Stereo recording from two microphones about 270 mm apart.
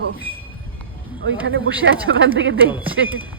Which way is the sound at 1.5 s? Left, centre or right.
Right.